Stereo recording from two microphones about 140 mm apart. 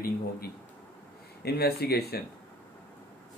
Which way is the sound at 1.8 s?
90° left.